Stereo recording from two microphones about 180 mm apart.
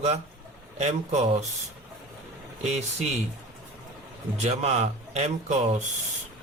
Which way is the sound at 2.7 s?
40° right (ahead or behind).